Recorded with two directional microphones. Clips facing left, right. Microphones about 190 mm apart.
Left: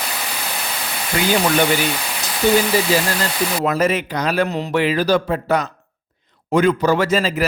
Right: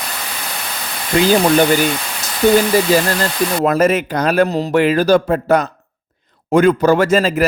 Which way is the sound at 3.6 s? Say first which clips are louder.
Right 5 dB; 50° right (ahead or behind).